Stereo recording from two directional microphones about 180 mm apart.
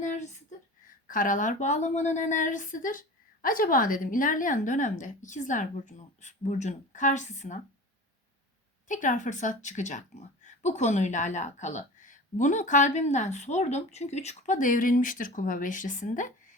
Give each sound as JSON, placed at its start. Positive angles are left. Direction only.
{"t": 0.0, "sound": "a sound", "side_deg": 45}
{"t": 1.0, "sound": "a woman's voice", "side_deg": 50}
{"t": 8.9, "sound": "a woman's voice", "side_deg": 45}